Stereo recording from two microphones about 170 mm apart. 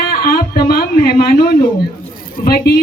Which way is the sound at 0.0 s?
60° left (ahead or behind).